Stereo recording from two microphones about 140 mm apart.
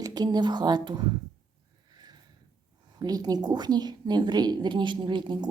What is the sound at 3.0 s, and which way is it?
Speech, 30° right (ahead or behind).